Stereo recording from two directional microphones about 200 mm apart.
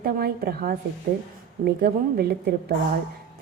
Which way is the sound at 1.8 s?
50° right (ahead or behind).